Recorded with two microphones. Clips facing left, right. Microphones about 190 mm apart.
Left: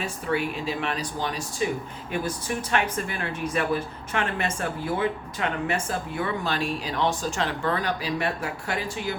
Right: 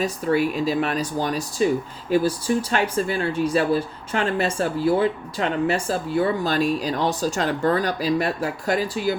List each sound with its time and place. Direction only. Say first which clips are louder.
0.0 s speech: right 6 dB; 40° right (ahead or behind)